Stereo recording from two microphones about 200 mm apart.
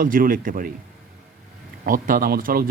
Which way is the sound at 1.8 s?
45° right (ahead or behind).